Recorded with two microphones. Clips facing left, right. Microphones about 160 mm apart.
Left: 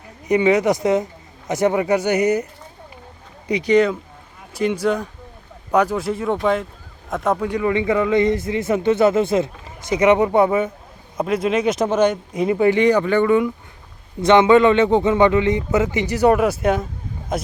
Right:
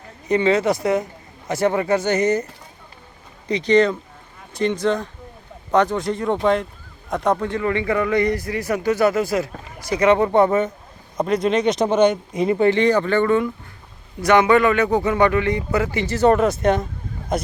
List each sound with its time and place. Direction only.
0.3 s a man's voice: 15° left (ahead or behind)